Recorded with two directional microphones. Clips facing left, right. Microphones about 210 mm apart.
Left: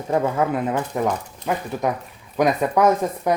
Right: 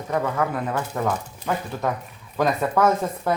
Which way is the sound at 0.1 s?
25° left (ahead or behind).